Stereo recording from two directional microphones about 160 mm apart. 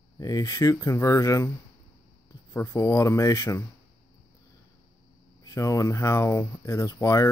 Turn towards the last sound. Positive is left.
turn(degrees=20)  # may be behind; listen again after turning